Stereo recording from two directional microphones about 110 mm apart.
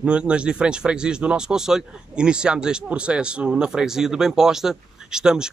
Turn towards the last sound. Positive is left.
turn(degrees=-5)  # may be behind; listen again after turning